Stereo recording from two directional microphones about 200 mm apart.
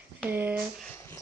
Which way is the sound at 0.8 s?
10° left (ahead or behind).